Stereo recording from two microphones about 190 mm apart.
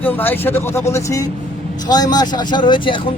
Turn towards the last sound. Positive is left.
turn(degrees=25)  # may be behind; listen again after turning